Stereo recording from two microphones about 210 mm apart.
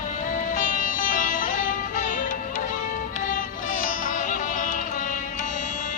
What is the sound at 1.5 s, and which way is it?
Music, 35° left (ahead or behind).